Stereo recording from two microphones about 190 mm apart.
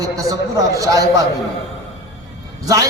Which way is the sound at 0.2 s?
15° right (ahead or behind).